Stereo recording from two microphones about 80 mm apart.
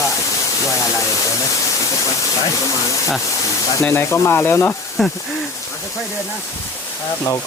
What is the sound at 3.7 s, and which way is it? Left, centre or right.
Speech, left.